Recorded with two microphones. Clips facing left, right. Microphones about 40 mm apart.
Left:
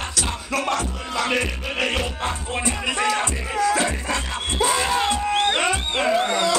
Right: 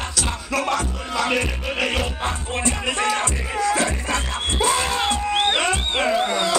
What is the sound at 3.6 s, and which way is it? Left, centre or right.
Music, left.